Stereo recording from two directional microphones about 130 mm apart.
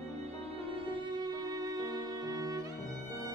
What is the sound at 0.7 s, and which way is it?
Music, 40° right (ahead or behind).